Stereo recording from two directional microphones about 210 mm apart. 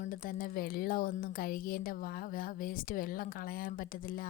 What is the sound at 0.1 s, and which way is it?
Speech, 40° left (ahead or behind).